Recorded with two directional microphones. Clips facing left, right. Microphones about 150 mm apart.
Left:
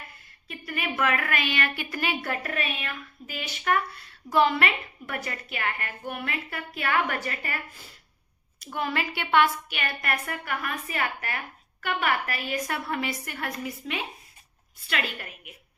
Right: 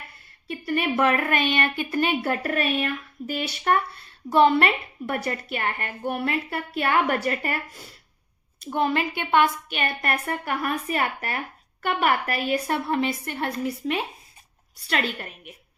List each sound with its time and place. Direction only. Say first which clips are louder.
0.4 s a woman's voice: right 8 dB; 35° right (ahead or behind)
2.3 s a woman's voice: right 7 dB; 40° right (ahead or behind)
8.7 s a woman's voice: right 6 dB; 25° right (ahead or behind)
9.7 s a woman's voice: right 4 dB; 35° right (ahead or behind)